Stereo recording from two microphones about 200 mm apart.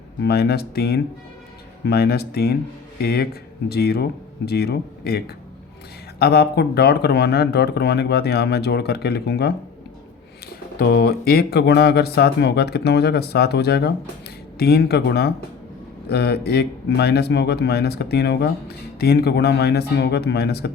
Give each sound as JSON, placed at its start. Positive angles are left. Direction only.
{"t": 0.2, "sound": "speech", "side_deg": 55}
{"t": 10.8, "sound": "speech", "side_deg": 50}